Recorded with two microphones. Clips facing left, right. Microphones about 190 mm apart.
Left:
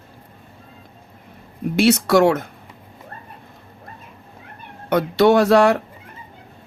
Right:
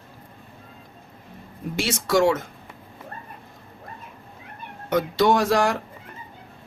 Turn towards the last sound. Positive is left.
turn(degrees=65)  # may be behind; listen again after turning